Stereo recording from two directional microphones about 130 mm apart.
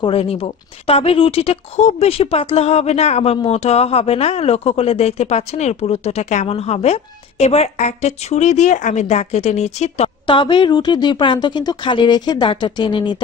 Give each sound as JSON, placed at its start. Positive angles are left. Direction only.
{"t": 0.0, "sound": "a woman's voice", "side_deg": 45}
{"t": 10.2, "sound": "speech", "side_deg": 40}